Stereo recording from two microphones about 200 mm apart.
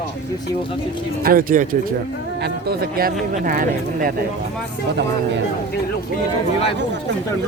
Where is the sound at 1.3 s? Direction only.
45° right (ahead or behind).